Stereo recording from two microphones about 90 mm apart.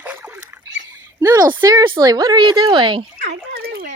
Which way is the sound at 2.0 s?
45° right (ahead or behind).